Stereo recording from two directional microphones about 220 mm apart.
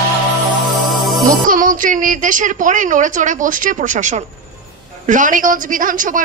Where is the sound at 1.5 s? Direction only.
40° right (ahead or behind).